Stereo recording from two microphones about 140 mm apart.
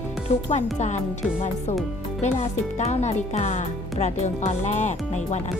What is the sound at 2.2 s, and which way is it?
Speech, 55° left (ahead or behind).